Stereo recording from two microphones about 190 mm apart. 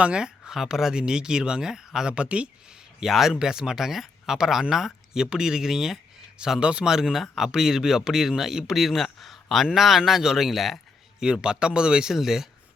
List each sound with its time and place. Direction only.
0.0 s speech: 5° right (ahead or behind)